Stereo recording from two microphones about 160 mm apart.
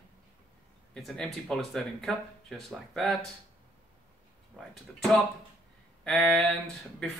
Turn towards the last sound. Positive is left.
turn(degrees=5)  # may be behind; listen again after turning